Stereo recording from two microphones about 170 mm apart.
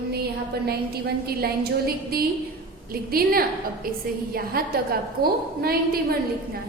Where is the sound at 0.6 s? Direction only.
65° right (ahead or behind).